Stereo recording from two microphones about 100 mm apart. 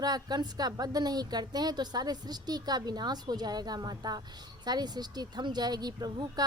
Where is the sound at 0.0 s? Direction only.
40° right (ahead or behind).